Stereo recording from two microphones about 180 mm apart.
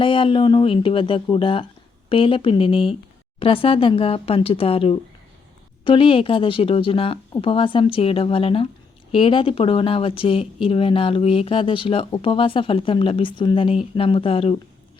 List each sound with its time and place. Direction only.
0.0 s speech: 30° left (ahead or behind)